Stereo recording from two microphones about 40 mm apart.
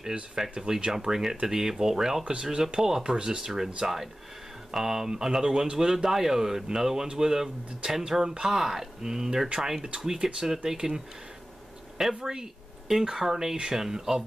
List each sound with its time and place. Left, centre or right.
0.4 s speech: centre
12.3 s speech: centre